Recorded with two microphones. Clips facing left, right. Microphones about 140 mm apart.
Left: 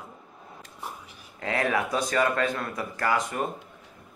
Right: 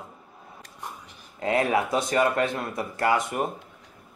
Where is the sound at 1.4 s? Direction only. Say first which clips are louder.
Right 3 dB; 25° right (ahead or behind).